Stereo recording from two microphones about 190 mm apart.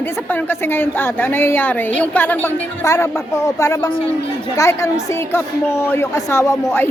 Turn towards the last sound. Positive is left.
turn(degrees=15)  # may be behind; listen again after turning